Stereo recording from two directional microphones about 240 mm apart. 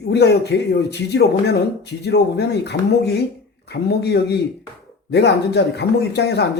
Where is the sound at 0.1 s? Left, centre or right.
Left.